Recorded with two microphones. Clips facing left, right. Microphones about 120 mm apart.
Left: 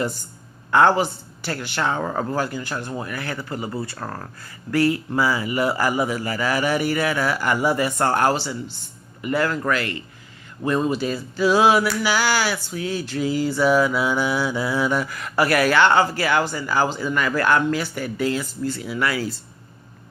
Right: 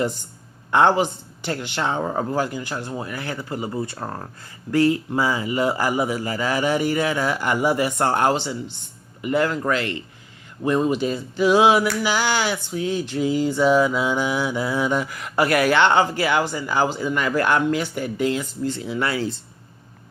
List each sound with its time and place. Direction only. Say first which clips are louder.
0.7 s a man's voice: even; 20° right (ahead or behind)
10.6 s a sound: right 1 dB; 15° right (ahead or behind)
12.0 s a man's voice: even; 20° right (ahead or behind)